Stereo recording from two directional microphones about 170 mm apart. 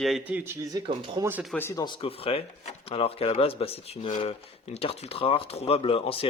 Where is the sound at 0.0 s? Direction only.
5° right (ahead or behind); by 1.3 s 25° right (ahead or behind).